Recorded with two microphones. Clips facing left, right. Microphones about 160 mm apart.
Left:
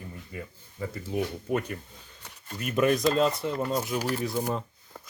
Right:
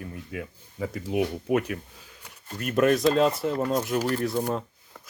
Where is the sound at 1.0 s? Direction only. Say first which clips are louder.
Right 4 dB; 15° right (ahead or behind).